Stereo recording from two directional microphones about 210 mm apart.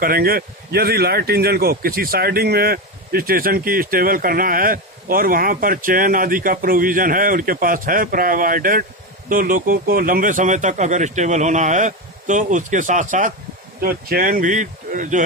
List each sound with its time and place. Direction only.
0.0 s speech: 45° right (ahead or behind)